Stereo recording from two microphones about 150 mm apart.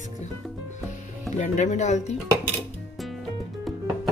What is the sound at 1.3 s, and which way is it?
Speech, 50° left (ahead or behind).